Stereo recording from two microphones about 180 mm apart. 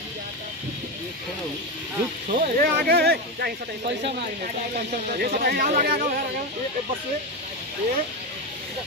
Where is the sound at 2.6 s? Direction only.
55° right (ahead or behind).